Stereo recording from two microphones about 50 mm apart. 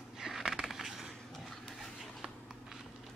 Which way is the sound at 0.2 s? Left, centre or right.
Centre.